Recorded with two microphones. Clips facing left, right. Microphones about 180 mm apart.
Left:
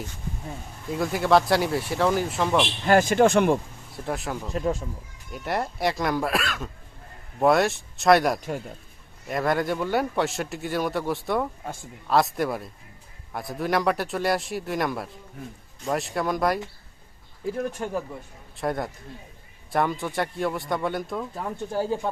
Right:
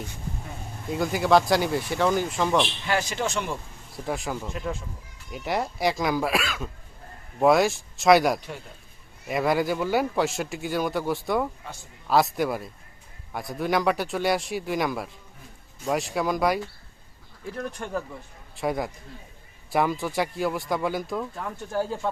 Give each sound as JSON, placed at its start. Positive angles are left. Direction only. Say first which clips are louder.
{"t": 0.9, "sound": "speech", "louder": "even", "side_deg": 0}
{"t": 2.8, "sound": "speech", "louder": "left 9 dB", "side_deg": 50}
{"t": 3.9, "sound": "speech", "louder": "even", "side_deg": 0}
{"t": 4.5, "sound": "speech", "louder": "left 6 dB", "side_deg": 40}
{"t": 5.3, "sound": "speech", "louder": "even", "side_deg": 0}
{"t": 11.6, "sound": "speech", "louder": "left 5 dB", "side_deg": 50}
{"t": 12.0, "sound": "speech", "louder": "even", "side_deg": 0}
{"t": 18.5, "sound": "speech", "louder": "even", "side_deg": 0}
{"t": 21.3, "sound": "speech", "louder": "left 1 dB", "side_deg": 20}